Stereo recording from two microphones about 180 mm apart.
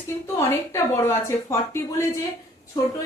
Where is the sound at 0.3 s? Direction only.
15° left (ahead or behind).